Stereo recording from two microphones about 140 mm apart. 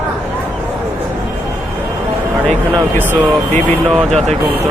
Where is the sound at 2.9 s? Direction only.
10° left (ahead or behind).